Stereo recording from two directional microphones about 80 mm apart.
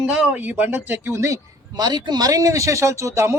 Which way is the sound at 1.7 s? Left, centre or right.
Right.